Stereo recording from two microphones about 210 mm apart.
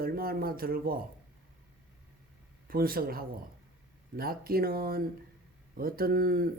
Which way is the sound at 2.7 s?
45° right (ahead or behind).